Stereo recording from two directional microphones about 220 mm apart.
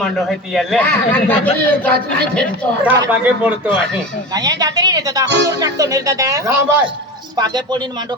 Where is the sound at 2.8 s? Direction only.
5° right (ahead or behind).